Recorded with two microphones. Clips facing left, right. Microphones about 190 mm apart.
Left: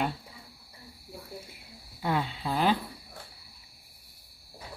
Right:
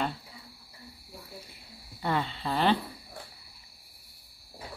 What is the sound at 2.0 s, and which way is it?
Speech, 5° left (ahead or behind).